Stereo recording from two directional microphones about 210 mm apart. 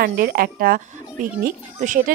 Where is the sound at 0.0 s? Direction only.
45° right (ahead or behind).